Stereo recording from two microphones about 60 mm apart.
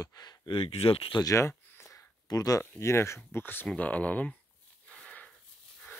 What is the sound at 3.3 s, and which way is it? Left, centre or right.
Speech, left.